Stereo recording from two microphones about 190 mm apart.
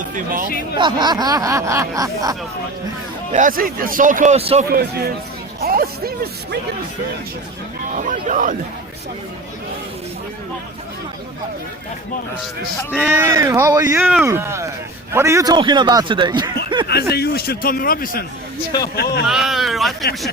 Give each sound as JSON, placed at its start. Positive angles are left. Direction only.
{"t": 0.1, "sound": "speech", "side_deg": -45}
{"t": 0.8, "sound": "speech", "side_deg": -25}
{"t": 3.3, "sound": "a man's voice", "side_deg": -45}
{"t": 4.7, "sound": "a man's voice", "side_deg": -55}
{"t": 7.9, "sound": "speech", "side_deg": -40}
{"t": 13.1, "sound": "speech", "side_deg": -10}
{"t": 16.8, "sound": "a man's voice", "side_deg": 55}
{"t": 19.3, "sound": "speech", "side_deg": 0}